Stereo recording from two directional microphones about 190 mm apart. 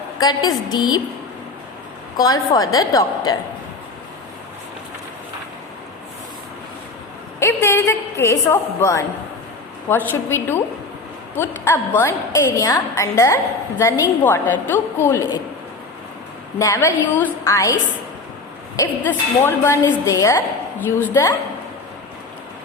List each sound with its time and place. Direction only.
0.2 s a woman's voice: 20° left (ahead or behind)
2.1 s a woman's voice: 20° left (ahead or behind)
7.3 s a woman's voice: 15° left (ahead or behind)
16.6 s a woman's voice: 15° left (ahead or behind)
18.8 s a woman's voice: 10° left (ahead or behind)